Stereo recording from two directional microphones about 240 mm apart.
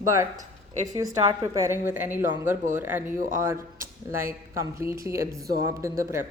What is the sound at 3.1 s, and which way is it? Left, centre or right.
Speech, right.